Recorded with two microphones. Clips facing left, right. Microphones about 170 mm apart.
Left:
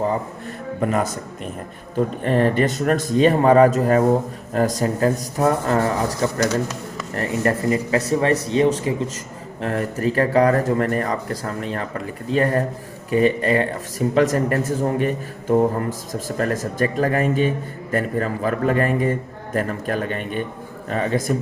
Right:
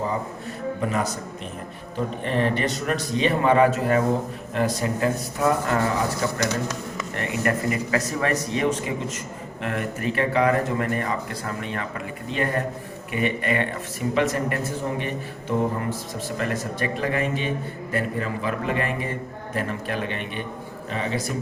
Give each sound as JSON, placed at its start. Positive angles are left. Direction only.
{"t": 0.8, "sound": "a man's voice", "side_deg": 50}
{"t": 2.2, "sound": "a man's voice", "side_deg": 45}